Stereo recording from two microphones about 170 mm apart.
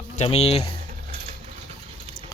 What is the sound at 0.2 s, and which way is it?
Speech, 35° left (ahead or behind).